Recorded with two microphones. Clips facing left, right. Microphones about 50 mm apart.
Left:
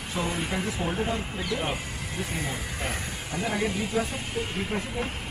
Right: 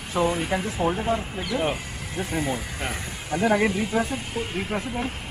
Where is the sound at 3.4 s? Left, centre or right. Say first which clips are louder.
Right 8 dB; right.